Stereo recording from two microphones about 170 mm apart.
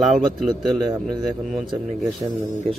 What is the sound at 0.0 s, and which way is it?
Speech, centre (ahead or behind).